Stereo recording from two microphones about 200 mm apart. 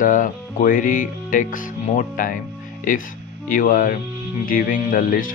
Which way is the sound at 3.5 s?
45° left (ahead or behind).